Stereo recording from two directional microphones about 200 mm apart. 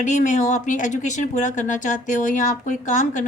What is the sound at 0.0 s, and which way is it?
Speech, 40° left (ahead or behind).